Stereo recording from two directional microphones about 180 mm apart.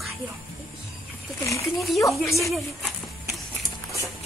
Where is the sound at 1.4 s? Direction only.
15° left (ahead or behind).